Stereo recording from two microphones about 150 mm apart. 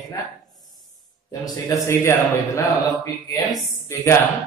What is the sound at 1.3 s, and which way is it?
Speech, 25° left (ahead or behind).